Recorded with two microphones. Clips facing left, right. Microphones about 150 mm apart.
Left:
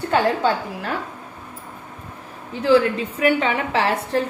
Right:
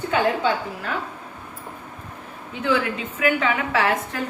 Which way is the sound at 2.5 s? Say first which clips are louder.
Left 6 dB; 35° left (ahead or behind).